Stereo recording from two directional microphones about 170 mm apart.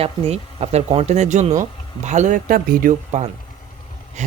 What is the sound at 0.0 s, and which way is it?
Speech, 35° right (ahead or behind).